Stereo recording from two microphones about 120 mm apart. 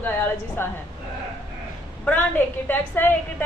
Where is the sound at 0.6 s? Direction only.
20° left (ahead or behind).